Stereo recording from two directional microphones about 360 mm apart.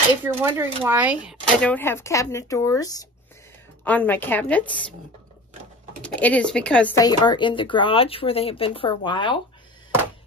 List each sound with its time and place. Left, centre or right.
0.2 s a woman's voice: centre
6.0 s speech: centre